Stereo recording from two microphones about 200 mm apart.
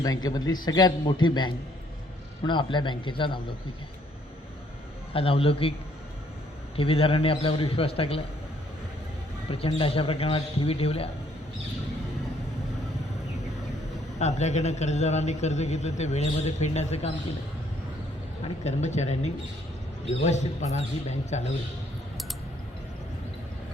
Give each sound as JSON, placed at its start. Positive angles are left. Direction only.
{"t": 0.0, "sound": "a man's voice", "side_deg": 20}
{"t": 5.1, "sound": "a man's voice", "side_deg": 30}
{"t": 6.7, "sound": "a man's voice", "side_deg": 30}
{"t": 9.5, "sound": "a man's voice", "side_deg": 30}
{"t": 14.2, "sound": "a man's voice", "side_deg": 35}
{"t": 18.4, "sound": "a man's voice", "side_deg": 35}